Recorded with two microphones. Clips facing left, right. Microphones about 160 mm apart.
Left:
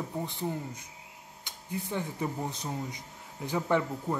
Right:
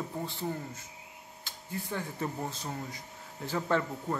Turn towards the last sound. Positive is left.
turn(degrees=15)  # may be behind; listen again after turning